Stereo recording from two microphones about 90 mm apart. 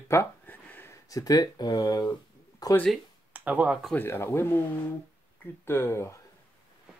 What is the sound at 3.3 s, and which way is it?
Speech, 15° right (ahead or behind).